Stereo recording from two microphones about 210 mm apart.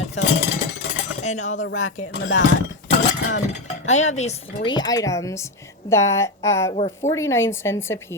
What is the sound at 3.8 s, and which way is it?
A woman's voice, 35° left (ahead or behind).